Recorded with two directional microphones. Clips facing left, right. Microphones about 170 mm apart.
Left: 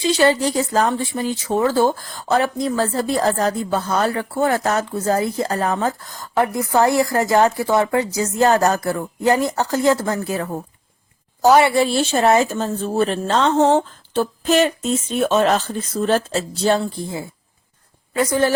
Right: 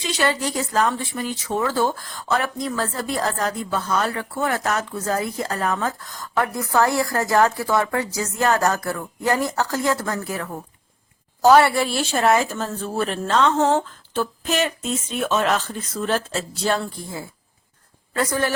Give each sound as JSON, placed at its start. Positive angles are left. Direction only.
{"t": 0.0, "sound": "speech", "side_deg": 30}
{"t": 11.4, "sound": "speech", "side_deg": 15}
{"t": 18.3, "sound": "speech", "side_deg": 25}